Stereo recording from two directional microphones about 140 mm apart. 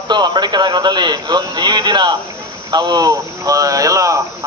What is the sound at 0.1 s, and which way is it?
A man's voice, 30° right (ahead or behind).